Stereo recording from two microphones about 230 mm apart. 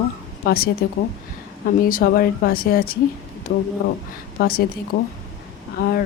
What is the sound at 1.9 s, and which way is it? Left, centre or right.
Speech, left.